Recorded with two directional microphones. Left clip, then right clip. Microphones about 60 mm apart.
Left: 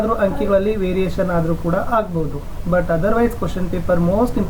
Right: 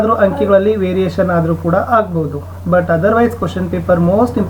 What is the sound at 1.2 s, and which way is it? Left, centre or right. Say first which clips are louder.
Speech: right 7 dB; centre.